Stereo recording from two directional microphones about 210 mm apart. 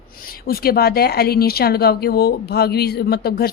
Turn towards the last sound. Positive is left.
turn(degrees=50)  # may be behind; listen again after turning